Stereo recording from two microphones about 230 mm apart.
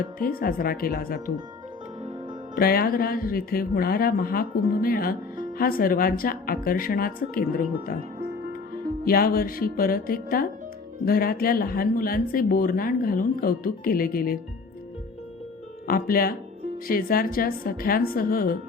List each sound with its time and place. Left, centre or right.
0.0 s speech: left
2.6 s speech: left
8.2 s music: right
9.0 s speech: left
15.9 s speech: left